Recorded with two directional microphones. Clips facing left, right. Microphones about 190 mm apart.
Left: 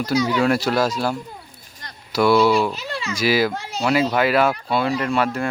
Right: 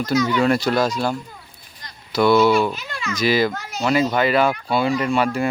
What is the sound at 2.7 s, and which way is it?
Speech, 30° left (ahead or behind).